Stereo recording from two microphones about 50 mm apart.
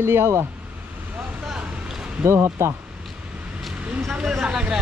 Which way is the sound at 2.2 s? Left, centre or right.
Right.